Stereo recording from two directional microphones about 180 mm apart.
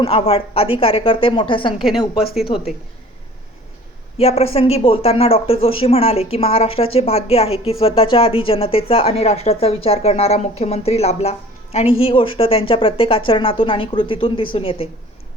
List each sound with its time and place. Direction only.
0.0 s a woman's voice: 30° left (ahead or behind)
4.2 s speech: 35° left (ahead or behind)